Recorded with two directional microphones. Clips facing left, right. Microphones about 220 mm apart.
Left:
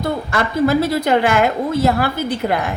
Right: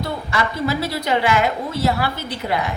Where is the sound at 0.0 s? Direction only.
50° left (ahead or behind).